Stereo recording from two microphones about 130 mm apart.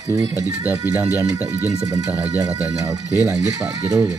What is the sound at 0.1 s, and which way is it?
Speech, 20° right (ahead or behind).